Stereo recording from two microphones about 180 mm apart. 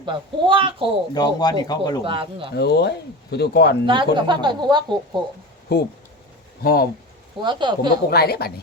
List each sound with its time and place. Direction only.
0.0 s speech: 25° right (ahead or behind)
1.1 s speech: 20° left (ahead or behind)
2.0 s speech: 30° right (ahead or behind)
2.6 s speech: 65° left (ahead or behind)
3.8 s speech: 25° right (ahead or behind)
5.7 s speech: 60° left (ahead or behind)
7.4 s speech: 25° right (ahead or behind)
8.1 s speech: 60° left (ahead or behind)